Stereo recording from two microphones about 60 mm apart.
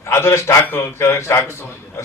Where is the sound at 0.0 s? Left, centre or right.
Left.